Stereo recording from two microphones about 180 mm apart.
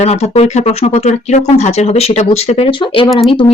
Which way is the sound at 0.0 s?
35° left (ahead or behind).